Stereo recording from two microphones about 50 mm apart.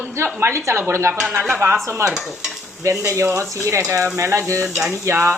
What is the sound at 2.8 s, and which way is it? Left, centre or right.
A woman's voice, right.